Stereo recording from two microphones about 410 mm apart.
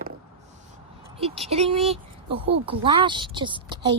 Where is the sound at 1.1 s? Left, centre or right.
Centre.